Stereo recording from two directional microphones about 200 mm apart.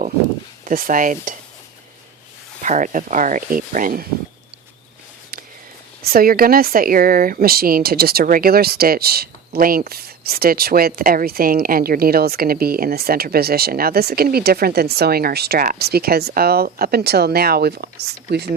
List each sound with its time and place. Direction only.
0.6 s speech: 40° right (ahead or behind)
2.6 s speech: 40° right (ahead or behind)
6.0 s speech: 50° right (ahead or behind)